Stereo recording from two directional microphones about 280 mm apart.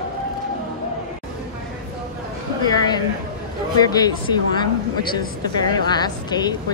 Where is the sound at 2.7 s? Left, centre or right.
Centre.